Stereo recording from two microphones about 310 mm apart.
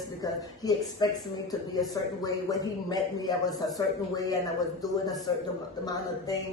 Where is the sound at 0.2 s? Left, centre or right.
Centre.